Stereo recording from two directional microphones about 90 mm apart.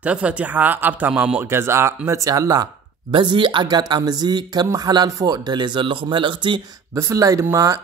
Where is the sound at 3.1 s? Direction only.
65° right (ahead or behind).